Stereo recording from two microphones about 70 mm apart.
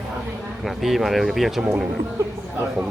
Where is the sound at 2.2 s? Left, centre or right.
Right.